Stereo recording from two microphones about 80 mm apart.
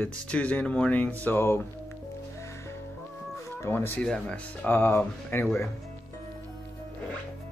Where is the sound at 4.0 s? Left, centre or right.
Centre.